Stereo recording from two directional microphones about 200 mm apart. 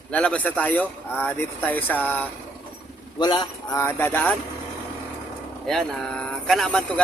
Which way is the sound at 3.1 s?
20° left (ahead or behind).